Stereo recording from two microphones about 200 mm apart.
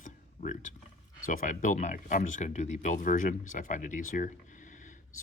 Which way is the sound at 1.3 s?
40° left (ahead or behind).